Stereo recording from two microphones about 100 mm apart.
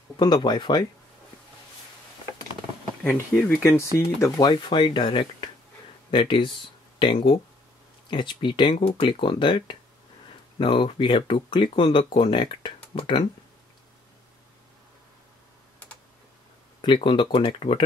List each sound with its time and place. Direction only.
0.2 s speech: 45° left (ahead or behind)
3.0 s speech: 20° left (ahead or behind)
3.6 s speech: 30° left (ahead or behind); by 13.2 s 60° left (ahead or behind)
16.8 s speech: 55° left (ahead or behind)